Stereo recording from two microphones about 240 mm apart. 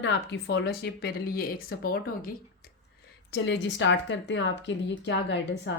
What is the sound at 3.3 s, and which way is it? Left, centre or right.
Speech, left.